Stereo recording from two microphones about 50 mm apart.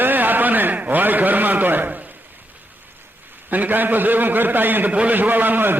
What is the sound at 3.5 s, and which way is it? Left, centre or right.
A man's voice, right.